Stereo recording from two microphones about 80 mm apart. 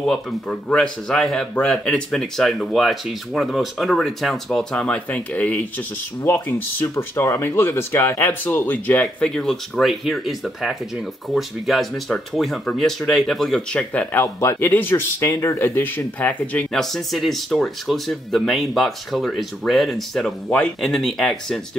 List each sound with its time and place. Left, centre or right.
0.0 s speech: centre
6.2 s speech: left
9.0 s speech: centre
14.2 s speech: left
16.7 s speech: centre